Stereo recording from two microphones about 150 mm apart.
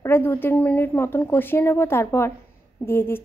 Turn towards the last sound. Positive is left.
turn(degrees=15)  # may be behind; listen again after turning